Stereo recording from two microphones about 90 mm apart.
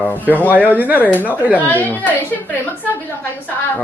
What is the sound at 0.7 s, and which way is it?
Speech, 20° right (ahead or behind).